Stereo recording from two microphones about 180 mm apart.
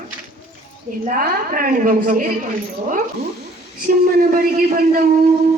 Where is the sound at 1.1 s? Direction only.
50° right (ahead or behind).